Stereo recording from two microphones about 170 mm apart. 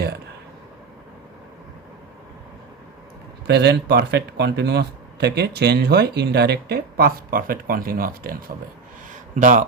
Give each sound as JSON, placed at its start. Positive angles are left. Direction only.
{"t": 3.4, "sound": "speech", "side_deg": -75}
{"t": 9.3, "sound": "speech", "side_deg": -50}